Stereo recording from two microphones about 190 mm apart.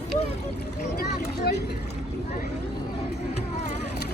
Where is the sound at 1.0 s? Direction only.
55° left (ahead or behind).